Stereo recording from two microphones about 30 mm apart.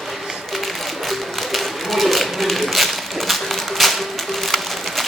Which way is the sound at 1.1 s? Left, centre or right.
Centre.